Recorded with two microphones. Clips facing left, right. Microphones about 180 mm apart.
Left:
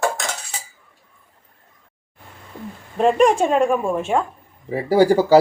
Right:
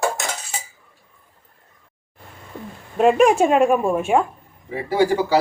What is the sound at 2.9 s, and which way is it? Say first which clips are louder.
A woman's voice: right 1 dB; 5° right (ahead or behind).